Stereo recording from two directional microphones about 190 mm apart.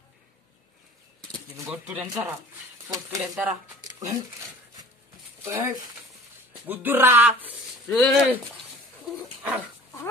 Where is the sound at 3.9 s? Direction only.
20° right (ahead or behind).